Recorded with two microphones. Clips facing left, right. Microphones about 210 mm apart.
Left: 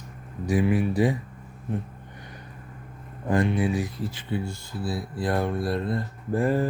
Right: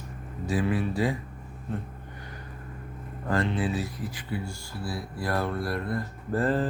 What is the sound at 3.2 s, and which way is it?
Speech, 15° left (ahead or behind).